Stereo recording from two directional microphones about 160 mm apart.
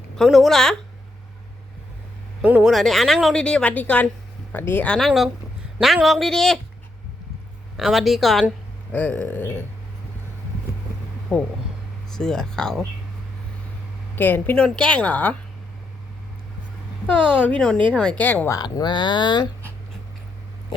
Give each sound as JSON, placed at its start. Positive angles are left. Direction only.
{"t": 0.2, "sound": "speech", "side_deg": 0}
{"t": 2.4, "sound": "a woman's voice", "side_deg": -10}
{"t": 7.8, "sound": "a woman's voice", "side_deg": 0}
{"t": 11.3, "sound": "speech", "side_deg": 5}
{"t": 14.2, "sound": "a woman's voice", "side_deg": 10}
{"t": 17.4, "sound": "a woman's voice", "side_deg": 5}
{"t": 18.5, "sound": "speech", "side_deg": 25}